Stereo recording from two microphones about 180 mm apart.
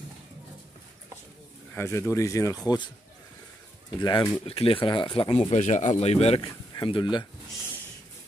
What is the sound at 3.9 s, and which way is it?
Speech, 25° left (ahead or behind).